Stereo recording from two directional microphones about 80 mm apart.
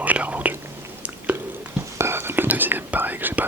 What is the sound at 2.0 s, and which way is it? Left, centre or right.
Whispering, right.